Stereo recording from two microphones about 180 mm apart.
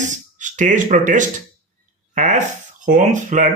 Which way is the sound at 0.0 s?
45° right (ahead or behind).